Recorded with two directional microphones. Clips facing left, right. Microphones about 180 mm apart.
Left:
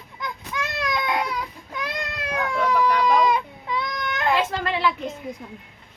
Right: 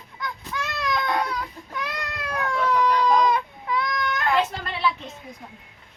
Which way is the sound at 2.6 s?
10° left (ahead or behind).